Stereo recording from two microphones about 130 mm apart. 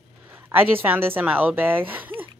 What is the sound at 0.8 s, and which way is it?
Speech, 15° right (ahead or behind).